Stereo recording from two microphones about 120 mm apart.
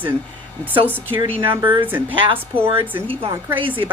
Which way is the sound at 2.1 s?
45° right (ahead or behind).